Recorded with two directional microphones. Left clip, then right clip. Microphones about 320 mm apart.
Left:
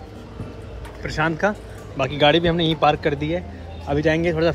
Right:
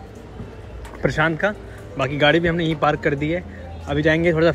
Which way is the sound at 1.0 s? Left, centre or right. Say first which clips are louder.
Right 2 dB; centre.